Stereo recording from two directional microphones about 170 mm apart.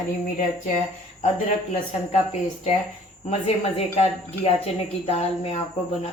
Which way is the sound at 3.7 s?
35° left (ahead or behind).